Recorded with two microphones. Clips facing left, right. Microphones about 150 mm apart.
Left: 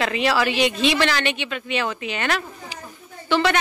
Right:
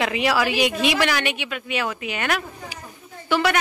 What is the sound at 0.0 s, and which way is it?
Speech, 10° right (ahead or behind).